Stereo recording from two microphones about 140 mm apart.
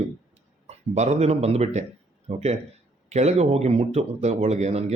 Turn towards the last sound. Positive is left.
turn(degrees=-50)  # may be behind; listen again after turning